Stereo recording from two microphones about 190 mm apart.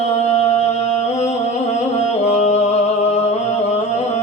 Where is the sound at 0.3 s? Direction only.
35° left (ahead or behind).